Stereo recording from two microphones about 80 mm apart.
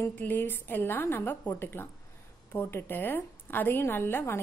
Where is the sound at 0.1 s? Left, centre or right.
Left.